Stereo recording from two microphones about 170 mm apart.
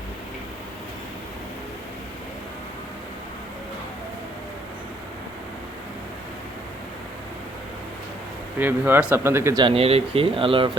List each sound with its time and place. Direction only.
8.5 s speech: 10° right (ahead or behind)
9.6 s speech: 35° right (ahead or behind)